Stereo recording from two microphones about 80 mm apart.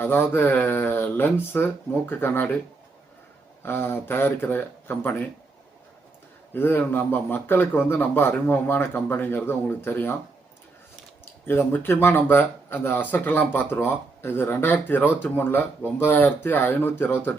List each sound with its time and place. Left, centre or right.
0.0 s a man's voice: left
3.6 s a man's voice: left
6.5 s a man's voice: left
11.4 s a man's voice: left